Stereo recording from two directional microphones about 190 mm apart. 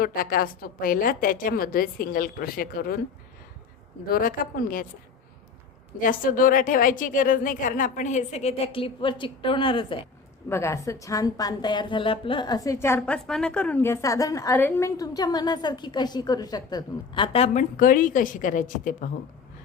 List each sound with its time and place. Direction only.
0.0 s a woman's voice: 50° left (ahead or behind)
4.1 s a woman's voice: 45° left (ahead or behind)
6.0 s a woman's voice: 45° left (ahead or behind); by 10.0 s 25° left (ahead or behind)
10.5 s a woman's voice: 15° left (ahead or behind); by 19.0 s 45° left (ahead or behind)